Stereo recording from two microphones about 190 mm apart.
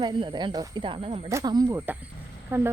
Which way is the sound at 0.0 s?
25° right (ahead or behind).